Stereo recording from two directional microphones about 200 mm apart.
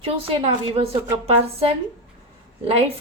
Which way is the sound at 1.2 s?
30° right (ahead or behind).